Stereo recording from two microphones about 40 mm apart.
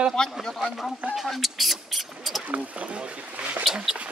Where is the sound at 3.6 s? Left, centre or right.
Centre.